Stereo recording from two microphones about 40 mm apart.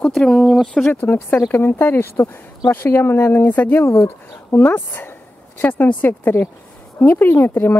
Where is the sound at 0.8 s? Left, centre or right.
Left.